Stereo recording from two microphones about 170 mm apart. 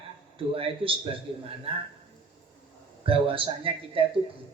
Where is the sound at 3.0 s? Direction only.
30° right (ahead or behind).